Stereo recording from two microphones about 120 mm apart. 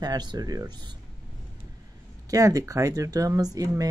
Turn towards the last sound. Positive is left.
turn(degrees=-30)  # may be behind; listen again after turning